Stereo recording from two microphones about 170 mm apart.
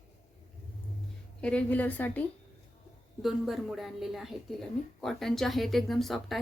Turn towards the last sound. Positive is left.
turn(degrees=0)  # may be behind; listen again after turning